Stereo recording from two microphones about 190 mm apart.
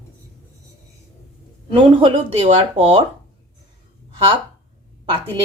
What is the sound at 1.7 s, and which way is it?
Speech, 30° right (ahead or behind).